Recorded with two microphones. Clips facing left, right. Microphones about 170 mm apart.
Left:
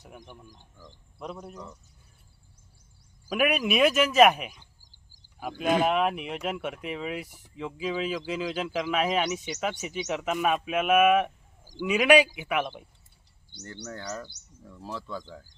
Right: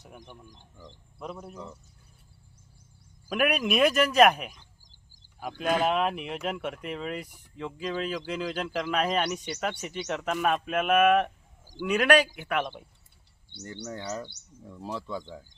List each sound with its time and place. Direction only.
0.1 s speech: centre (ahead or behind)
3.2 s speech: centre (ahead or behind)
13.8 s speech: 5° right (ahead or behind)
14.6 s speech: 15° right (ahead or behind)